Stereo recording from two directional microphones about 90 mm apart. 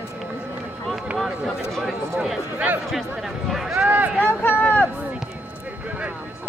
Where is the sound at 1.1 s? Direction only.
Centre (ahead or behind).